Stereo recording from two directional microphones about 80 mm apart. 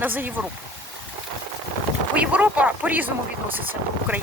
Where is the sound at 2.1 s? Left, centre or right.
Centre.